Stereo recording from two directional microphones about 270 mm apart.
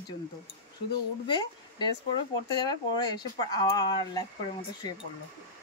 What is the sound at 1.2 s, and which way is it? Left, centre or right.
Speech, centre.